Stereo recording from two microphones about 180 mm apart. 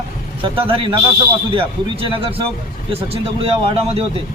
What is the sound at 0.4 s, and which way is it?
A man's voice, 30° right (ahead or behind).